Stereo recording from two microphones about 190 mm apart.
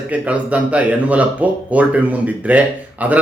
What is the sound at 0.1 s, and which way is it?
Speech, 5° right (ahead or behind).